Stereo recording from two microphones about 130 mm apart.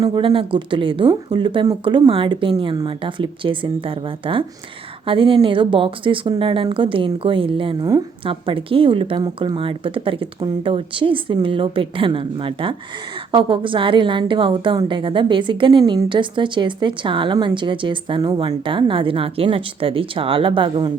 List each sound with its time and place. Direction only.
0.0 s a woman's voice: 40° right (ahead or behind)
9.2 s speech: 30° right (ahead or behind)
9.6 s speech: 40° right (ahead or behind)